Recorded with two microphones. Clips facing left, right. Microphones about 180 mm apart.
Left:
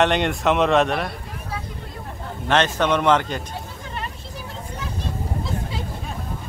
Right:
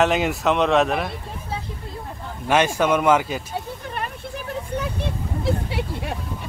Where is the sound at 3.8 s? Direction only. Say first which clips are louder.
Right 3 dB; 60° right (ahead or behind).